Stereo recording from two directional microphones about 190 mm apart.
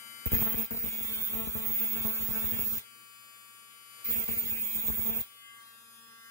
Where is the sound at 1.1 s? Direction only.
15° left (ahead or behind).